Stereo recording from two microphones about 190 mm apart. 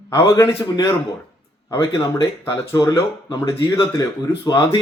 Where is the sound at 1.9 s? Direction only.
20° left (ahead or behind).